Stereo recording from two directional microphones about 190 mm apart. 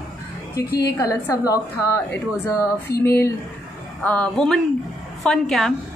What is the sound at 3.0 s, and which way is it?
A woman's voice, 15° left (ahead or behind).